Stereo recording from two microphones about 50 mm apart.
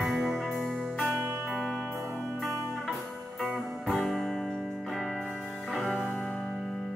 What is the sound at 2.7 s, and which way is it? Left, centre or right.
Music, centre.